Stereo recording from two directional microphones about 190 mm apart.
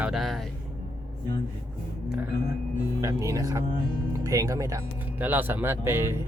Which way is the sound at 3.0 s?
15° right (ahead or behind).